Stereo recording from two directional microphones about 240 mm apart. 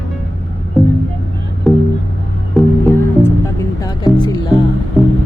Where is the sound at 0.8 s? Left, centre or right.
Centre.